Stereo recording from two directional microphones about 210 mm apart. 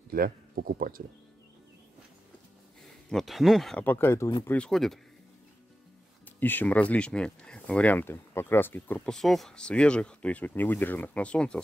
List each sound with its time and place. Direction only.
0.1 s speech: 45° right (ahead or behind)
3.1 s speech: centre (ahead or behind)
6.4 s speech: 10° left (ahead or behind)